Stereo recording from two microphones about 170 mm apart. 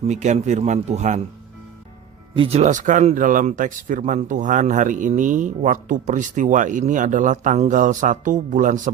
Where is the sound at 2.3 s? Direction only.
35° right (ahead or behind).